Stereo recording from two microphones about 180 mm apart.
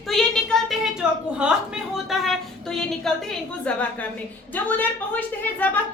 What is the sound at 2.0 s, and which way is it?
A woman's voice, centre (ahead or behind).